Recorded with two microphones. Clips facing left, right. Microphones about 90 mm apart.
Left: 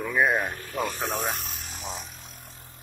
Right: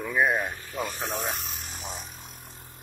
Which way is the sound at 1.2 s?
20° left (ahead or behind).